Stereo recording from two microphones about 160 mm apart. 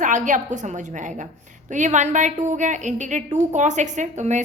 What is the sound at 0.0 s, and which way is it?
A woman's voice, 55° right (ahead or behind).